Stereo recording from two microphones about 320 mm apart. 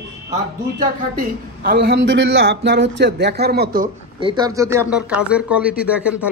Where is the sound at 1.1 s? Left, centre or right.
Right.